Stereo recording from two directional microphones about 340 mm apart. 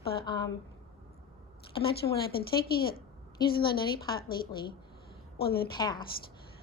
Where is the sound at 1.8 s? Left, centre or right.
Left.